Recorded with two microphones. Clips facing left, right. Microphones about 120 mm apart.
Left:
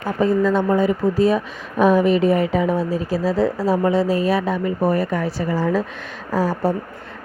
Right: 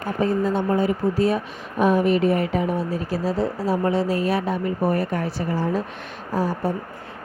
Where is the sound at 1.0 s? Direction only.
90° left.